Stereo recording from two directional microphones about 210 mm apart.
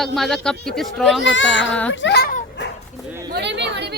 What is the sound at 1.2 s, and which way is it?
Speech, 60° left (ahead or behind).